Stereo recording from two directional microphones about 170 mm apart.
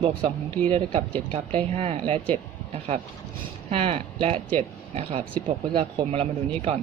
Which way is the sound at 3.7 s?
35° right (ahead or behind).